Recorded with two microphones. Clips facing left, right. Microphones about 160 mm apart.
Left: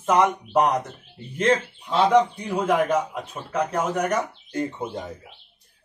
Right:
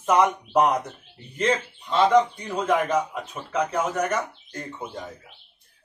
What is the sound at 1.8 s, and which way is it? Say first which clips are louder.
A man's voice: even; 5° left (ahead or behind).